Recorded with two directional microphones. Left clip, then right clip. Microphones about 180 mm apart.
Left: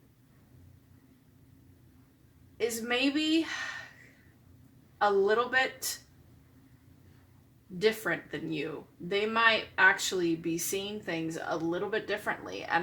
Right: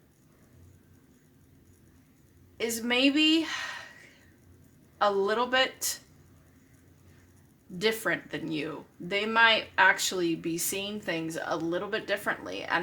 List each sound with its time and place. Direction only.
2.6 s speech: 40° right (ahead or behind)
4.9 s speech: 35° right (ahead or behind)
7.8 s speech: 35° right (ahead or behind)